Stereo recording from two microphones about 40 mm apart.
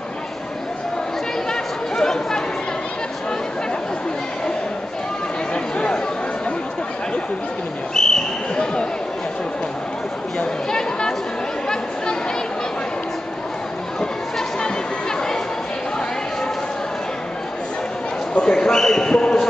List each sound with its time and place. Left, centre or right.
1.5 s chatter: centre
5.5 s chatter: left
7.9 s a sound: centre
10.4 s chatter: centre
14.6 s chatter: centre
18.3 s speech: left